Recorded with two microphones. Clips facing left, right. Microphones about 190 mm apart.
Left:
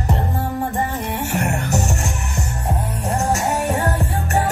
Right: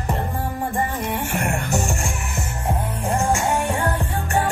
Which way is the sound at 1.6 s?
40° left (ahead or behind).